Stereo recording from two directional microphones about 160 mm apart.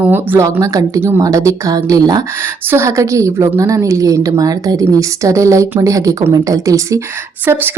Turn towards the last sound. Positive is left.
turn(degrees=-10)  # may be behind; listen again after turning